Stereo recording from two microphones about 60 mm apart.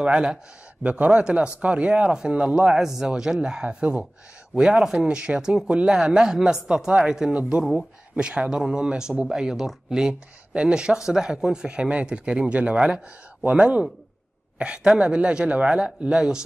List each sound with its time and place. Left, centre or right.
0.0 s speech: centre
0.8 s speech: right
2.7 s speech: centre
5.0 s speech: centre